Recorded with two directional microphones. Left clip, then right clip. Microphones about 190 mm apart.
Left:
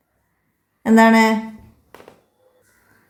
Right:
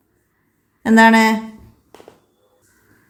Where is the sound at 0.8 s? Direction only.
20° right (ahead or behind).